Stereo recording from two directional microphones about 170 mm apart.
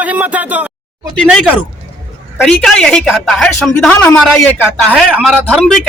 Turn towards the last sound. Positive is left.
turn(degrees=0)  # may be behind; listen again after turning